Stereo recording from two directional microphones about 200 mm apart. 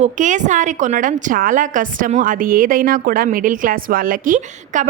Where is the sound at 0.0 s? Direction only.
40° right (ahead or behind).